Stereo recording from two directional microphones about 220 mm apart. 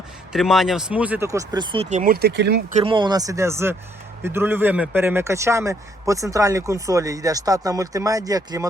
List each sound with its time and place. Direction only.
0.3 s a man's voice: centre (ahead or behind); by 2.6 s 50° right (ahead or behind)
2.7 s a man's voice: 25° right (ahead or behind)